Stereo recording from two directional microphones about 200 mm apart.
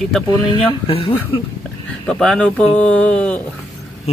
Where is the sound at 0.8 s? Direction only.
25° left (ahead or behind).